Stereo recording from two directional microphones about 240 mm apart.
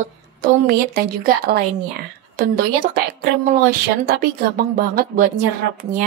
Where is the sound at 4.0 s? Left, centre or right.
Right.